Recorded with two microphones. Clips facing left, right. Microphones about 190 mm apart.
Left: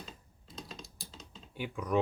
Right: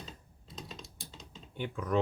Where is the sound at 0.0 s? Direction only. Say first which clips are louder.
Right 1 dB; centre (ahead or behind).